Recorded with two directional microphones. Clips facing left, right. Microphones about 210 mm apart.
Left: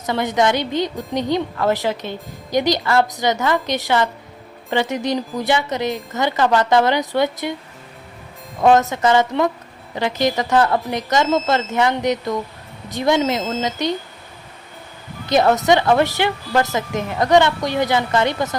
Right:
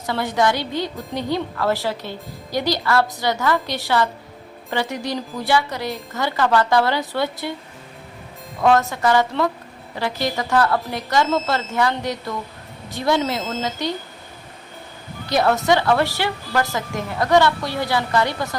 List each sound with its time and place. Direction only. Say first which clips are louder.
0.0 s a woman's voice: left 2 dB; 20° left (ahead or behind)
8.6 s a woman's voice: left 3 dB; 20° left (ahead or behind)
15.3 s a woman's voice: left 3 dB; 20° left (ahead or behind)